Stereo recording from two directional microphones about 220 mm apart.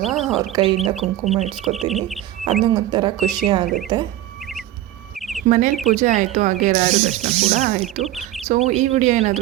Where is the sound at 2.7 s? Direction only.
20° right (ahead or behind).